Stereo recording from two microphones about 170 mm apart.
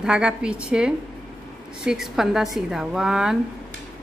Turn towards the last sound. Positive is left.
turn(degrees=-5)  # may be behind; listen again after turning